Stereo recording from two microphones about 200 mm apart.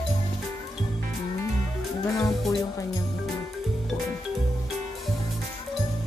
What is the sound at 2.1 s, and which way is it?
Music, 15° left (ahead or behind).